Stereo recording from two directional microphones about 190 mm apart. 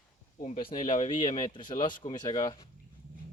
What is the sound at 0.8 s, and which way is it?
Speech, 40° left (ahead or behind).